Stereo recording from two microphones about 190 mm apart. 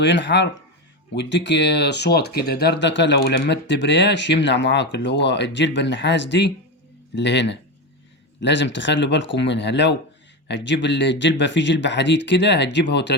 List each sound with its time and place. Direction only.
0.0 s speech: 70° left (ahead or behind)